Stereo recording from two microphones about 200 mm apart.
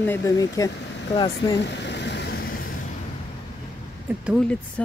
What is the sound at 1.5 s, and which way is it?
Vehicle, 60° left (ahead or behind).